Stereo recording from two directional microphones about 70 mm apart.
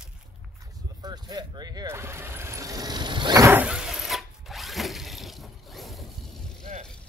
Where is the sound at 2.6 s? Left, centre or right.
Right.